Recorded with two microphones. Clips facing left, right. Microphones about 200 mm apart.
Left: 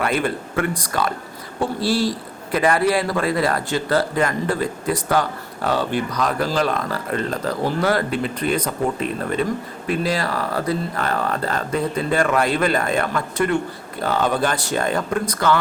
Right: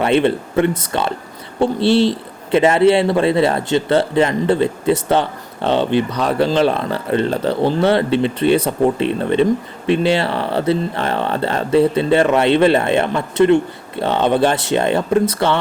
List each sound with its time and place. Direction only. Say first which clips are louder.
0.0 s a man's voice: right 7 dB; 25° right (ahead or behind)